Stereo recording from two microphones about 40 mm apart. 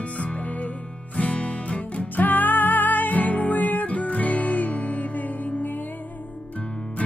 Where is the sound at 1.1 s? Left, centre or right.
Left.